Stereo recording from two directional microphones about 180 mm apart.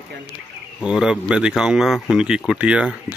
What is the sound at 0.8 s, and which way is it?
Speech, 5° right (ahead or behind).